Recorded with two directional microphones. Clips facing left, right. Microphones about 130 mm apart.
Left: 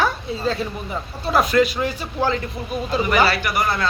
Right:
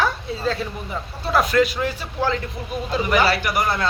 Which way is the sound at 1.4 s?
15° left (ahead or behind).